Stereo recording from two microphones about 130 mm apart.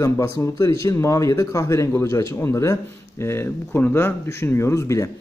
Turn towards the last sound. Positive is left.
turn(degrees=25)  # may be behind; listen again after turning